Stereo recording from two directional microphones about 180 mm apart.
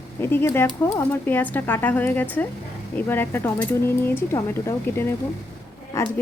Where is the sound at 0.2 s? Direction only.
10° left (ahead or behind).